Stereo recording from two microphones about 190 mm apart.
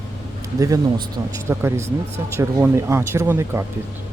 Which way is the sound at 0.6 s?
20° right (ahead or behind).